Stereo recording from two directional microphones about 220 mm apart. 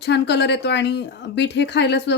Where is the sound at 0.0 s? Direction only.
50° left (ahead or behind).